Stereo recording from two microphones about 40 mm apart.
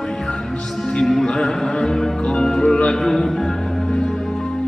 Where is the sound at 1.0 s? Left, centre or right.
Centre.